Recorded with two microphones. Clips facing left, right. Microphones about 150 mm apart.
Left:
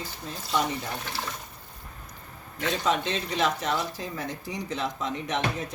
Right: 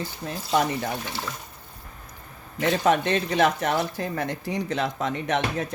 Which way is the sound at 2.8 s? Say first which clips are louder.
Right 5 dB; 60° right (ahead or behind).